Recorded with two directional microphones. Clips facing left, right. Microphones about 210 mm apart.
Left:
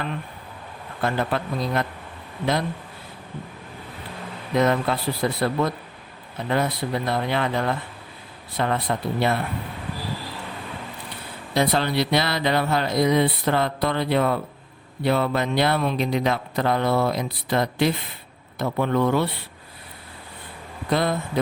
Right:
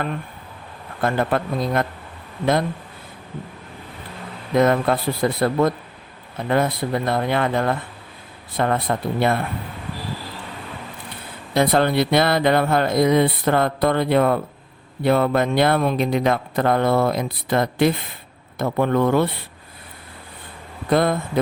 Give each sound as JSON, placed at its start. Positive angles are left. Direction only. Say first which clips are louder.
{"t": 1.0, "sound": "speech", "louder": "right 4 dB", "side_deg": -50}
{"t": 4.5, "sound": "speech", "louder": "right 4 dB", "side_deg": -50}
{"t": 11.5, "sound": "speech", "louder": "right 4 dB", "side_deg": -50}
{"t": 20.9, "sound": "speech", "louder": "right 4 dB", "side_deg": -50}